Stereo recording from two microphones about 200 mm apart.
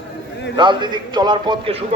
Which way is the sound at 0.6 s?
20° right (ahead or behind).